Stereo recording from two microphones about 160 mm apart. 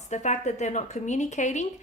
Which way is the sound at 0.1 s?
50° left (ahead or behind).